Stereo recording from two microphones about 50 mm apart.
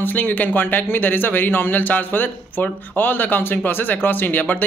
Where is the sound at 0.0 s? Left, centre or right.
Left.